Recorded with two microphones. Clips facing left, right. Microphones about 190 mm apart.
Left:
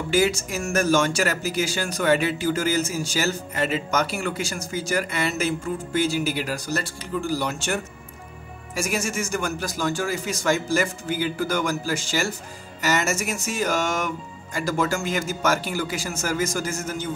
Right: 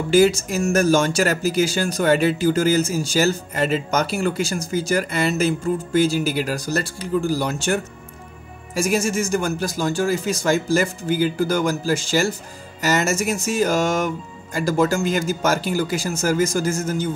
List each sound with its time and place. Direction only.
0.1 s speech: 35° right (ahead or behind)
8.7 s speech: 30° right (ahead or behind)